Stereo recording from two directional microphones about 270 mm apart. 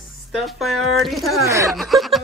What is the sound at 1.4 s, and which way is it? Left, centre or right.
Speech, centre.